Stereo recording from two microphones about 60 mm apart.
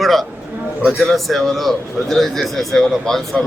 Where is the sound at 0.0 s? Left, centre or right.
Centre.